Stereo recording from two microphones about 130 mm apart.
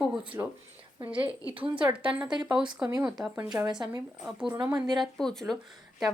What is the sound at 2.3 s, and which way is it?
Speech, 35° right (ahead or behind).